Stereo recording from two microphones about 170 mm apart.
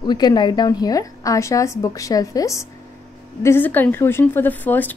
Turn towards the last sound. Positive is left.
turn(degrees=10)  # may be behind; listen again after turning